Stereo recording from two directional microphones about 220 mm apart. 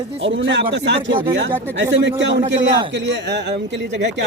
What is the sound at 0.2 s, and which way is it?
Speech, 55° right (ahead or behind).